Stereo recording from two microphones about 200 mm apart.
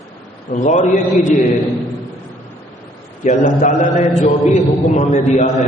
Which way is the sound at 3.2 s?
40° left (ahead or behind).